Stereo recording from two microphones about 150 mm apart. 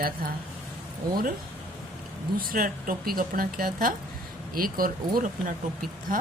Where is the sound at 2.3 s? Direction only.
70° right (ahead or behind).